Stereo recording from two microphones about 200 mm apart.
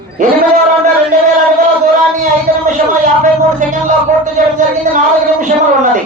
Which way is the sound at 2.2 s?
40° right (ahead or behind).